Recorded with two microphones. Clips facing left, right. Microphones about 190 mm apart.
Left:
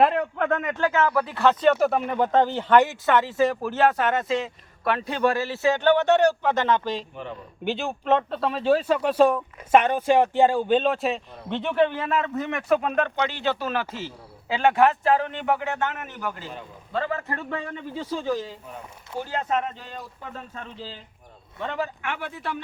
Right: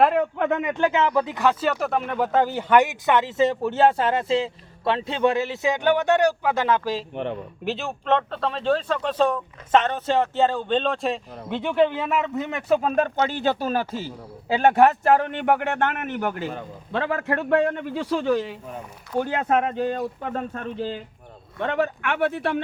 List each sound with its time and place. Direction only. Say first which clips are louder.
0.3 s speech: right 2 dB; 15° right (ahead or behind)
1.8 s speech: left 2 dB; centre (ahead or behind)
7.1 s speech: right 7 dB; 65° right (ahead or behind)
7.6 s speech: left 3 dB; centre (ahead or behind)
11.4 s speech: right 2 dB; 10° right (ahead or behind); by 22.6 s 70° right (ahead or behind)